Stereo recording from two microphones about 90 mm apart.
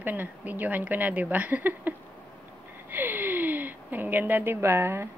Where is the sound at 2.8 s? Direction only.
20° right (ahead or behind).